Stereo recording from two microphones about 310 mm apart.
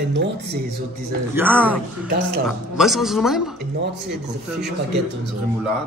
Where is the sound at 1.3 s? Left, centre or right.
Centre.